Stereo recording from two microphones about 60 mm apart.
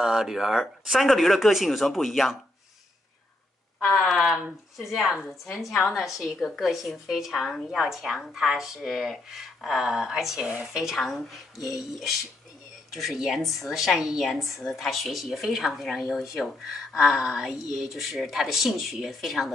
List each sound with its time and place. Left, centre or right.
0.0 s a woman's voice: centre
3.9 s a woman's voice: centre
10.4 s a woman's voice: right
10.7 s a woman's voice: centre
17.0 s a woman's voice: centre